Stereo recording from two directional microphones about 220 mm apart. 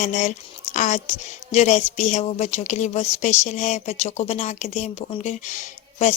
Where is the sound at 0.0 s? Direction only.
35° left (ahead or behind).